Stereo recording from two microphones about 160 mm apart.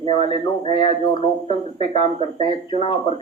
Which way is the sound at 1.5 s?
35° left (ahead or behind).